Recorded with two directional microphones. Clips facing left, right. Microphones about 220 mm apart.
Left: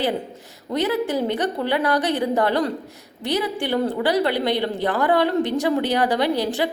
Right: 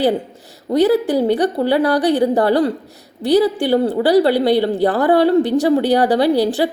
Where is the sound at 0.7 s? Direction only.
35° right (ahead or behind).